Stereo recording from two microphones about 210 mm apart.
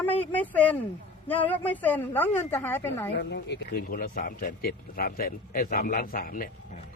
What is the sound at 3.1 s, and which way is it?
A man's voice, 50° left (ahead or behind).